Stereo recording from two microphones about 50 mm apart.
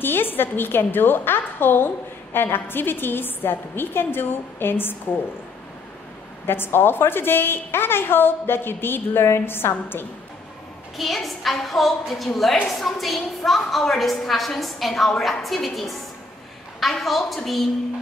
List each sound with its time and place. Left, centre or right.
0.0 s a woman's voice: left
6.4 s a woman's voice: left
11.0 s a woman's voice: centre